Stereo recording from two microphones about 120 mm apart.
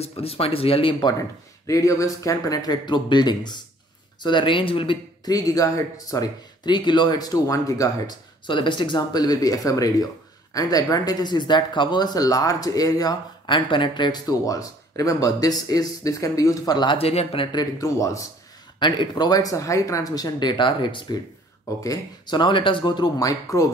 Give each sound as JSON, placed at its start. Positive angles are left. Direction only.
{"t": 0.0, "sound": "speech", "side_deg": 55}
{"t": 1.7, "sound": "speech", "side_deg": 25}
{"t": 5.2, "sound": "speech", "side_deg": 30}
{"t": 8.5, "sound": "speech", "side_deg": 45}
{"t": 18.8, "sound": "speech", "side_deg": 40}
{"t": 21.8, "sound": "speech", "side_deg": 35}